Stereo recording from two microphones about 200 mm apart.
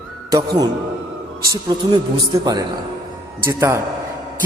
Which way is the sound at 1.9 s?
20° right (ahead or behind).